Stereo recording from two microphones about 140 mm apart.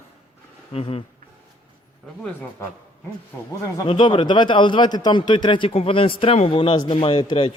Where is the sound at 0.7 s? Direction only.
45° left (ahead or behind).